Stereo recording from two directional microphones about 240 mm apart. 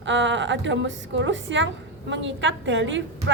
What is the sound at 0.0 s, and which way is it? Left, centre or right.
A woman's voice, right.